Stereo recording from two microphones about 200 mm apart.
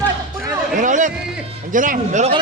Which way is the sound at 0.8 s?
40° right (ahead or behind).